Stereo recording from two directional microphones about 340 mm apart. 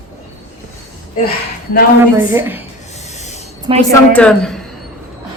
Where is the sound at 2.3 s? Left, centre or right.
Centre.